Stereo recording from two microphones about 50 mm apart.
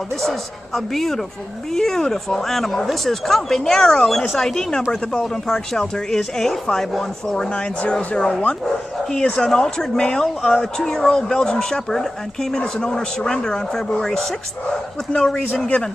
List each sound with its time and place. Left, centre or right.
0.2 s a man's voice: centre
7.9 s speech: centre